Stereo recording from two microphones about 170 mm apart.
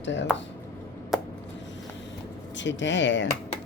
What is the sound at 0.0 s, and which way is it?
Speech, 90° left.